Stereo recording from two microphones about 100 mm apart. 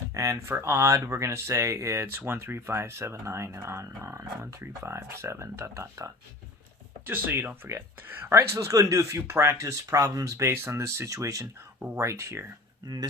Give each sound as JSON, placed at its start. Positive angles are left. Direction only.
{"t": 0.1, "sound": "speech", "side_deg": -35}
{"t": 7.1, "sound": "speech", "side_deg": -20}